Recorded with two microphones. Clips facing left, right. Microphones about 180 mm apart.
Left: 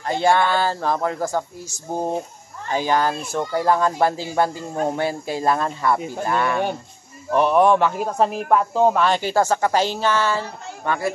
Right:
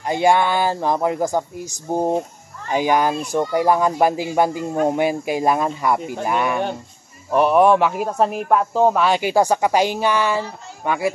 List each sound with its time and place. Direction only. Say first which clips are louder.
0.0 s speech: right 2 dB; 15° right (ahead or behind)